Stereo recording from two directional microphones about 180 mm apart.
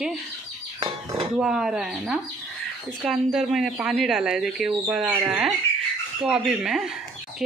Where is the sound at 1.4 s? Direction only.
5° right (ahead or behind).